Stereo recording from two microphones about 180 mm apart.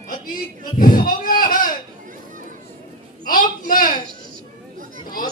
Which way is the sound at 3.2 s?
50° left (ahead or behind).